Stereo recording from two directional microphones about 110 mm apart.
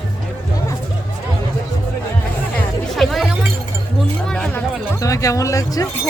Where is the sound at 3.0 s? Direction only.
Centre (ahead or behind).